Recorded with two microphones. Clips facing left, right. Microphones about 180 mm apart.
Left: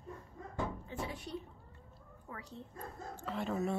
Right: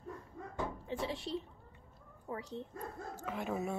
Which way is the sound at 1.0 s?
25° right (ahead or behind).